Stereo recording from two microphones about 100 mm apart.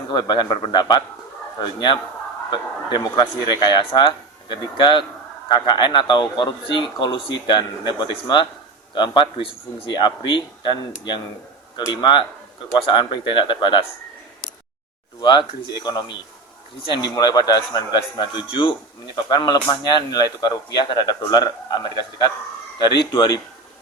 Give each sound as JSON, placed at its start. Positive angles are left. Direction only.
{"t": 0.1, "sound": "speech", "side_deg": 50}
{"t": 2.5, "sound": "speech", "side_deg": 50}
{"t": 11.9, "sound": "speech", "side_deg": 50}
{"t": 15.2, "sound": "speech", "side_deg": 50}
{"t": 19.1, "sound": "speech", "side_deg": 45}